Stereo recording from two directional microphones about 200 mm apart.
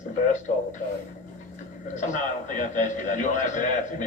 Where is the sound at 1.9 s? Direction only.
40° left (ahead or behind).